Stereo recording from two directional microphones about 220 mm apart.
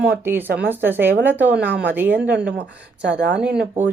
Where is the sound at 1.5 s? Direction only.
45° right (ahead or behind).